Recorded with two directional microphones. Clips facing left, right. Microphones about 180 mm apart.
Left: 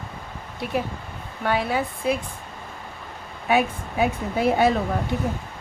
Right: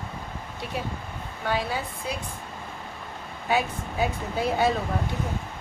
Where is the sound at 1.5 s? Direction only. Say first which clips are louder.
Left 5 dB; 60° left (ahead or behind).